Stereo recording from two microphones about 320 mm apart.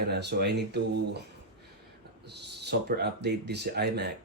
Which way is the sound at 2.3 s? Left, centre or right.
Right.